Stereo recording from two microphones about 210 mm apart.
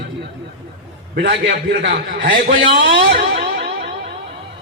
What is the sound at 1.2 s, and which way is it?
A man's voice, 55° right (ahead or behind).